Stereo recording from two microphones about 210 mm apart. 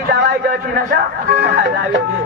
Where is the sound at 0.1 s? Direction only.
55° right (ahead or behind).